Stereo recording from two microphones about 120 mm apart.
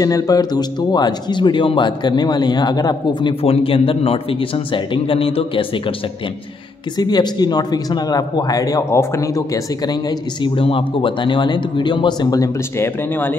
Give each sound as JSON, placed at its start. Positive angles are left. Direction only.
{"t": 0.0, "sound": "speech", "side_deg": 30}
{"t": 7.0, "sound": "speech", "side_deg": 35}
{"t": 10.4, "sound": "speech", "side_deg": 45}
{"t": 12.7, "sound": "speech", "side_deg": 20}